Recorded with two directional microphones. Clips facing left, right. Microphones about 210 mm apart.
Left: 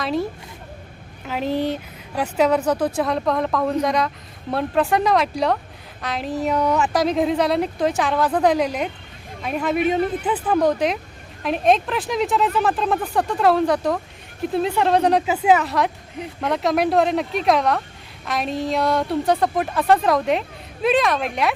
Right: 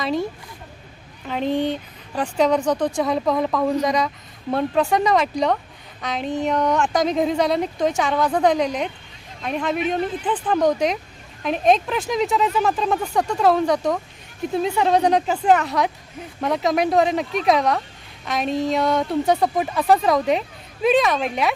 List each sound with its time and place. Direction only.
0.0 s speech: centre (ahead or behind)
1.3 s speech: 5° left (ahead or behind)